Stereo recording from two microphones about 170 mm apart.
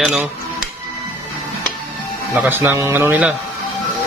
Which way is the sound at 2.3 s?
10° right (ahead or behind).